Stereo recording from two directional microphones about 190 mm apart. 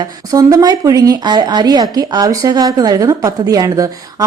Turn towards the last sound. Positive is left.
turn(degrees=-15)  # may be behind; listen again after turning